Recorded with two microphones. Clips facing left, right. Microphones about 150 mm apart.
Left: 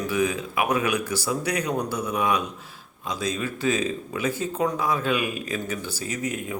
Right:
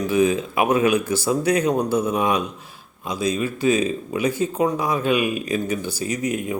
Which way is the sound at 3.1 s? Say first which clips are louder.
Right 5 dB; 10° right (ahead or behind).